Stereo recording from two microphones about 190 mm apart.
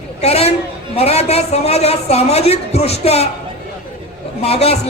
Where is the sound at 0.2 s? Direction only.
35° left (ahead or behind).